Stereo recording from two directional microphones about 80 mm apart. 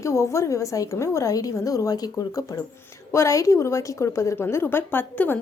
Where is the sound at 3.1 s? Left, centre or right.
Left.